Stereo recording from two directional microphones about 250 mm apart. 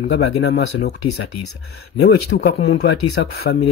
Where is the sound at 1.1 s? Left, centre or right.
Left.